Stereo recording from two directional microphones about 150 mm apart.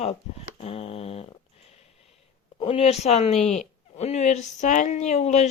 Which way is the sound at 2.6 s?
40° left (ahead or behind).